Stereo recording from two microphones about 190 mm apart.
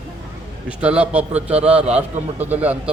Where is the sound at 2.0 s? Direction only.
10° right (ahead or behind).